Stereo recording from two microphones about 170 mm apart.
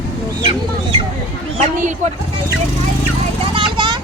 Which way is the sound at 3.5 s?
30° right (ahead or behind).